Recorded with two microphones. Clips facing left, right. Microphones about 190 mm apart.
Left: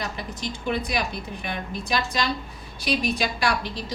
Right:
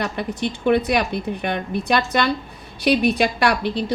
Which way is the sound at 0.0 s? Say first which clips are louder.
Right 8 dB; 65° right (ahead or behind).